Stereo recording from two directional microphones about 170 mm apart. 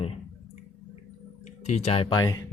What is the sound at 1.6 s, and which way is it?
Speech, 40° left (ahead or behind).